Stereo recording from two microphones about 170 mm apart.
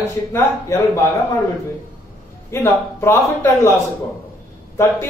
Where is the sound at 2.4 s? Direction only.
15° left (ahead or behind).